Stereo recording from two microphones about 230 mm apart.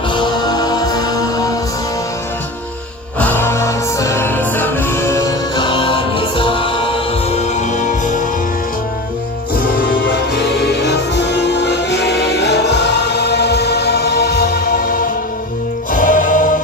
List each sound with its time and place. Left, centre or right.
0.1 s music: centre
3.2 s music: centre; by 8.2 s left
9.7 s music: left